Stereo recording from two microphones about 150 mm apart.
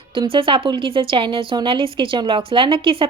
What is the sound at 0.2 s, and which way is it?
Speech, 35° right (ahead or behind).